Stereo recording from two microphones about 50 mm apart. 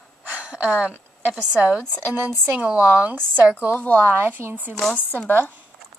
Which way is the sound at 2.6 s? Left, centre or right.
Right.